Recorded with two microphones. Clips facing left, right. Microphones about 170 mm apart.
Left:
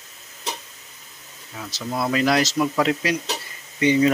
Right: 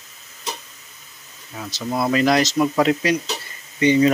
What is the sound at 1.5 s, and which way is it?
Speech, 10° right (ahead or behind).